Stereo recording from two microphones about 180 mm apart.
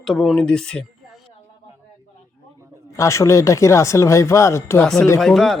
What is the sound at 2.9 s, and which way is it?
Speech, 15° left (ahead or behind).